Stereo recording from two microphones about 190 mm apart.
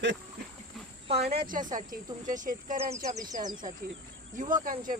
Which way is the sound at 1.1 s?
55° right (ahead or behind).